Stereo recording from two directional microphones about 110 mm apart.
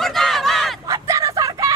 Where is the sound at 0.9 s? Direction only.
30° right (ahead or behind).